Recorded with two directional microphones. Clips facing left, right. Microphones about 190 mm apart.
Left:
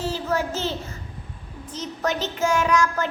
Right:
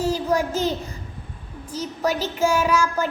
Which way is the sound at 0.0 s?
15° right (ahead or behind).